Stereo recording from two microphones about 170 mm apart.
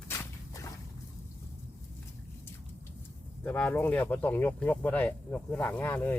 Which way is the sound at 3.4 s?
10° left (ahead or behind).